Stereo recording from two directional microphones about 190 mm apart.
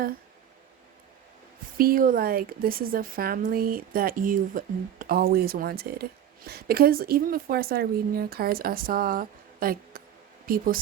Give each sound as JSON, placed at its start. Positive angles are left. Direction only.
{"t": 1.8, "sound": "a woman's voice", "side_deg": -50}